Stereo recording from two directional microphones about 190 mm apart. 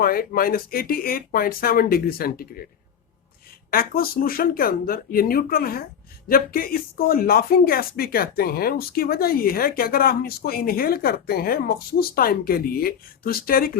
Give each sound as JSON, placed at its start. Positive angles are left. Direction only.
{"t": 0.0, "sound": "speech", "side_deg": 50}
{"t": 3.7, "sound": "speech", "side_deg": 50}